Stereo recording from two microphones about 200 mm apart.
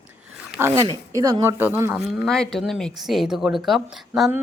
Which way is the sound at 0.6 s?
15° right (ahead or behind).